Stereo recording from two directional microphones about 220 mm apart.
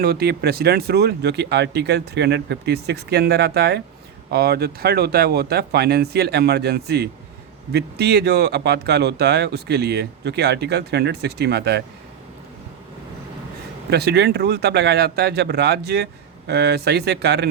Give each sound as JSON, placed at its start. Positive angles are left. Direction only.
{"t": 0.0, "sound": "speech", "side_deg": -45}
{"t": 13.9, "sound": "speech", "side_deg": -50}